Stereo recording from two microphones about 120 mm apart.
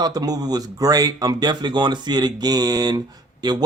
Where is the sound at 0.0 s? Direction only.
35° right (ahead or behind).